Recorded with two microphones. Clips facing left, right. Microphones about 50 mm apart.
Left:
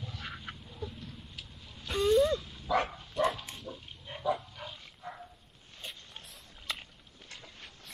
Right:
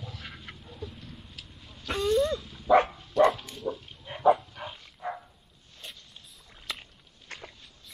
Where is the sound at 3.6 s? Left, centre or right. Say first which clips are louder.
Right 10 dB; centre.